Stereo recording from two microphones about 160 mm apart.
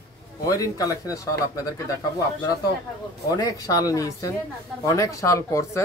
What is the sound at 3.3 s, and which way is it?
Speech, 25° left (ahead or behind).